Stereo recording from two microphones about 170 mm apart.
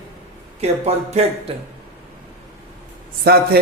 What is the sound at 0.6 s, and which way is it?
Speech, 40° right (ahead or behind).